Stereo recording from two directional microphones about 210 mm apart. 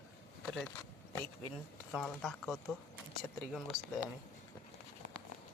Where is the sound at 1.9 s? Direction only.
Centre (ahead or behind).